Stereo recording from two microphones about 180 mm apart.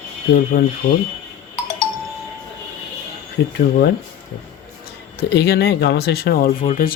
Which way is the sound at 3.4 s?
75° left (ahead or behind).